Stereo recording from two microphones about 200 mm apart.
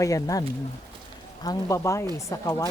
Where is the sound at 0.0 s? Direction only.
15° left (ahead or behind).